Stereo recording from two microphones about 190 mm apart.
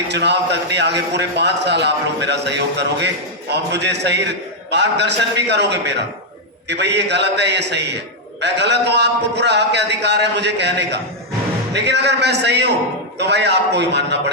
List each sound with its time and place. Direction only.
0.1 s a man's voice: 65° right (ahead or behind)